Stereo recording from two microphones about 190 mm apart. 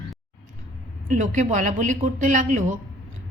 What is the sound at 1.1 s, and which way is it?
A woman's voice, 40° right (ahead or behind).